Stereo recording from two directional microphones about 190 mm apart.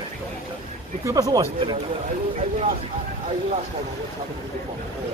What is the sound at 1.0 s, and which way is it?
Speech, 20° right (ahead or behind).